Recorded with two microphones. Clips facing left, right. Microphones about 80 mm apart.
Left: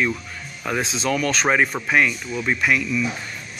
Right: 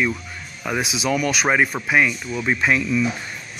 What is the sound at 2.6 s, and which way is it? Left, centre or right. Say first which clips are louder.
Speech: right 2 dB; right.